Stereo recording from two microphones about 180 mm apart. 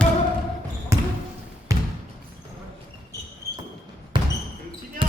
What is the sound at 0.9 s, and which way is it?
Basketball bounce, 15° right (ahead or behind).